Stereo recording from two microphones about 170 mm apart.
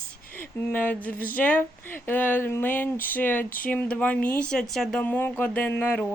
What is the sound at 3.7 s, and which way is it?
Speech, 10° left (ahead or behind).